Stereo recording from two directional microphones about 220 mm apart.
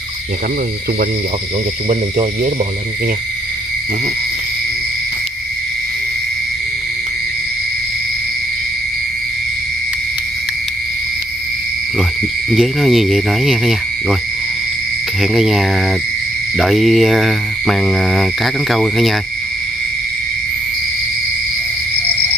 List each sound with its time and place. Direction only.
1.9 s speech: 30° right (ahead or behind)
12.0 s speech: centre (ahead or behind)
15.2 s speech: centre (ahead or behind)